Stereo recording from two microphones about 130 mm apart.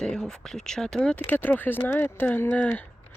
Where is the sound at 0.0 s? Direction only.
5° left (ahead or behind).